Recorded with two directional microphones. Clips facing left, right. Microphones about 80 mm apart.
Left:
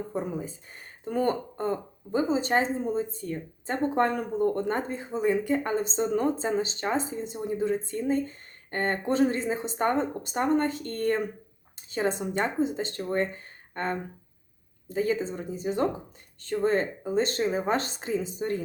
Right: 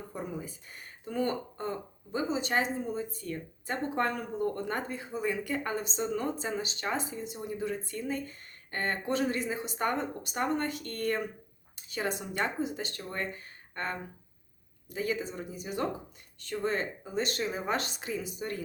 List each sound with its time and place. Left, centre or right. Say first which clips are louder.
0.1 s speech: left 6 dB; left